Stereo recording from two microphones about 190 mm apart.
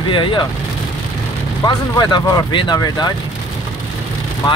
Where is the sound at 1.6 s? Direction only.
20° left (ahead or behind).